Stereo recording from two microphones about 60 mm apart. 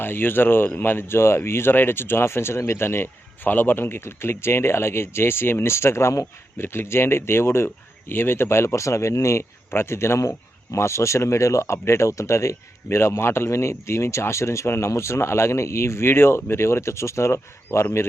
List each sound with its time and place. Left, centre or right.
0.0 s speech: left